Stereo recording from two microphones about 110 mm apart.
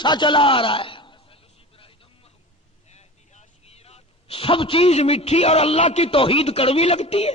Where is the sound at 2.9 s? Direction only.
90° left.